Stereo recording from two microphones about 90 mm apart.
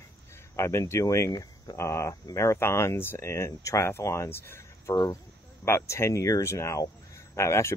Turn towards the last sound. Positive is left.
turn(degrees=30)  # may be behind; listen again after turning